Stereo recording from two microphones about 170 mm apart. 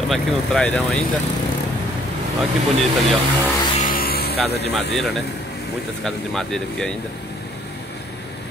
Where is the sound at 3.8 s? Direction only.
60° left (ahead or behind).